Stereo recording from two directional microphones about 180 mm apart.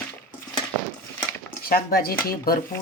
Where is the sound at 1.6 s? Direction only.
55° left (ahead or behind).